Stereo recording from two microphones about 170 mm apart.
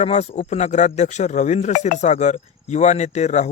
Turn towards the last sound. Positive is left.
turn(degrees=45)  # may be behind; listen again after turning